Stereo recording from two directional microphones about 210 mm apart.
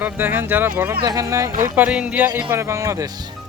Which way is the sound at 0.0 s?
10° right (ahead or behind).